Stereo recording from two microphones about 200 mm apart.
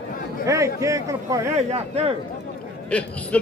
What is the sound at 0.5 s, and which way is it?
A man's voice, 15° right (ahead or behind).